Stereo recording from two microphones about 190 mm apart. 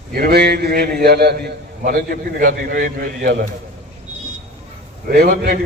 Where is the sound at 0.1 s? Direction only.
55° right (ahead or behind).